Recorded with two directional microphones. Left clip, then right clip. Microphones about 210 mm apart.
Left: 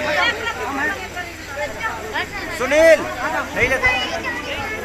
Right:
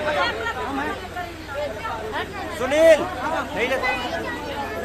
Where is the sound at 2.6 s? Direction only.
15° left (ahead or behind).